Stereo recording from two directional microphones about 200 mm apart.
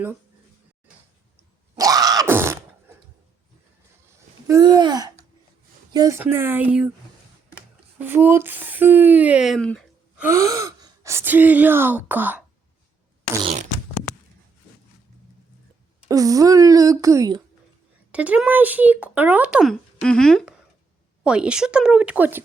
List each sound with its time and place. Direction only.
1.7 s grunt: 20° right (ahead or behind)
4.4 s speech: 20° right (ahead or behind)
7.9 s speech: 10° right (ahead or behind)
10.2 s speech: 15° right (ahead or behind)
13.4 s fart: 35° right (ahead or behind)
16.0 s speech: 15° right (ahead or behind)
18.1 s speech: 5° right (ahead or behind)